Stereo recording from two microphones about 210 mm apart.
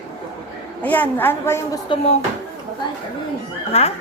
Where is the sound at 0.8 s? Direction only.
5° left (ahead or behind).